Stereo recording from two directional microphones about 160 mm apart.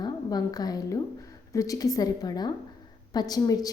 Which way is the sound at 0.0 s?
25° left (ahead or behind).